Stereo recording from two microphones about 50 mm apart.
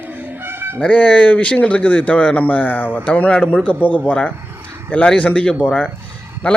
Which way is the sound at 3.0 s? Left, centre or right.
Left.